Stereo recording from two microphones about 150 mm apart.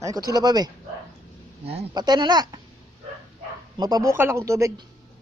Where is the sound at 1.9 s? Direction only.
30° right (ahead or behind).